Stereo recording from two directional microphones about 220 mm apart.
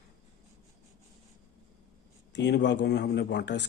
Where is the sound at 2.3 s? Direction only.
50° left (ahead or behind).